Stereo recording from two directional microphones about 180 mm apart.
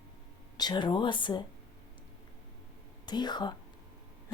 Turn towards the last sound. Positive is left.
turn(degrees=25)  # may be behind; listen again after turning